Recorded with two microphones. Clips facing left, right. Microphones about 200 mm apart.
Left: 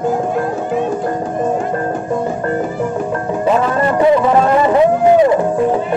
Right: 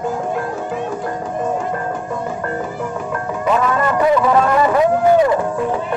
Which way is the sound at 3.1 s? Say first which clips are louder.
Left 2 dB; 30° left (ahead or behind).